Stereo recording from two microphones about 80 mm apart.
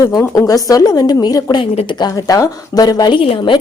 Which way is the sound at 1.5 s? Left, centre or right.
Left.